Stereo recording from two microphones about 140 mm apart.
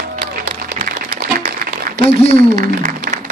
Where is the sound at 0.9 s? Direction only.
85° right.